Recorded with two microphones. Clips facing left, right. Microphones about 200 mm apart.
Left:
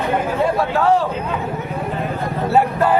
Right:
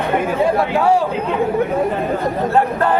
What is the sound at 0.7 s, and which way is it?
Speech, 10° right (ahead or behind).